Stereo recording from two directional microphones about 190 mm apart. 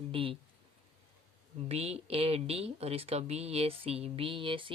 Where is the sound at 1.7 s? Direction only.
35° right (ahead or behind).